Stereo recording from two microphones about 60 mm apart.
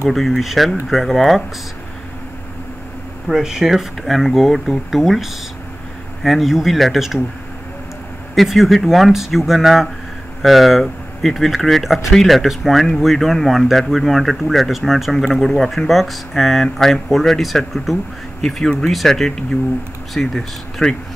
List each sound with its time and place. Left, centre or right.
0.1 s speech: centre
3.3 s speech: centre
8.4 s speech: centre